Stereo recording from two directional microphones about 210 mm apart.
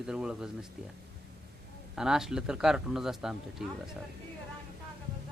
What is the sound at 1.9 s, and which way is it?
A man's voice, 5° right (ahead or behind).